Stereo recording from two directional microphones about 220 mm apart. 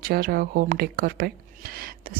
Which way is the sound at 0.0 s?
45° right (ahead or behind).